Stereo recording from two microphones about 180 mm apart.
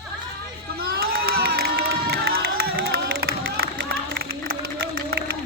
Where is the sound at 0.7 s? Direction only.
55° right (ahead or behind).